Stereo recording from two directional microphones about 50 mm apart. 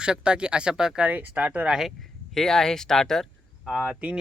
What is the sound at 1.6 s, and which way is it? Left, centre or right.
Speech, centre.